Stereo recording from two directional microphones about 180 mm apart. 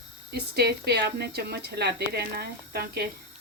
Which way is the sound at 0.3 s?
65° right (ahead or behind).